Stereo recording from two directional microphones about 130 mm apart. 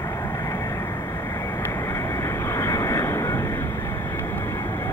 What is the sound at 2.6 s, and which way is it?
Vehicle, 25° left (ahead or behind).